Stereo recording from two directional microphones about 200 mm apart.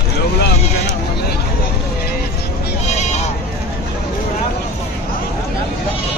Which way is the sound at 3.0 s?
35° left (ahead or behind).